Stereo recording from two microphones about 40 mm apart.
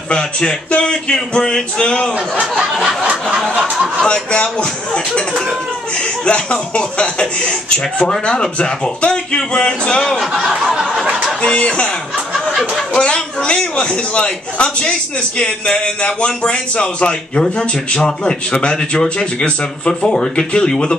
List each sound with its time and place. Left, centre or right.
0.1 s a man's voice: centre
4.0 s a man's voice: left
11.4 s a man's voice: left
12.9 s a man's voice: left